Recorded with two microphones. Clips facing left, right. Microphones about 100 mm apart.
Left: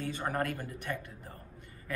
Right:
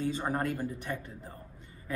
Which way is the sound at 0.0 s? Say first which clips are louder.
Right 2 dB; 20° right (ahead or behind).